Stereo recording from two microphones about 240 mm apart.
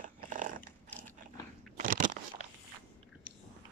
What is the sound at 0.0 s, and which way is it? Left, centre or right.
Dog, right.